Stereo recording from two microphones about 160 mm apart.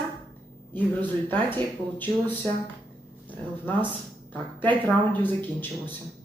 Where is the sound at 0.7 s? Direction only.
10° left (ahead or behind).